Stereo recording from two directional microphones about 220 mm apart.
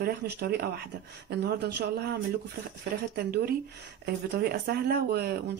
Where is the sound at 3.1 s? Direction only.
45° right (ahead or behind).